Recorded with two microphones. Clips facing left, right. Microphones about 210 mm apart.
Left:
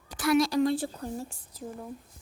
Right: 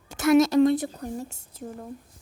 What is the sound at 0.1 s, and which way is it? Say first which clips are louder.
Speech: right 6 dB; 25° right (ahead or behind).